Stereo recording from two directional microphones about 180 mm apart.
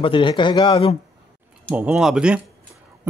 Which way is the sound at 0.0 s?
30° left (ahead or behind).